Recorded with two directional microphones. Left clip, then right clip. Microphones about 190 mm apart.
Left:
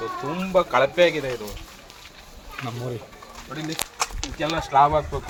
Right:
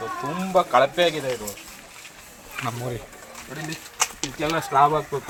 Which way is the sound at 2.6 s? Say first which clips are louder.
Right 2 dB; centre (ahead or behind).